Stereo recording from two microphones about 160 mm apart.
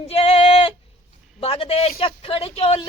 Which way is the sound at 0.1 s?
35° left (ahead or behind).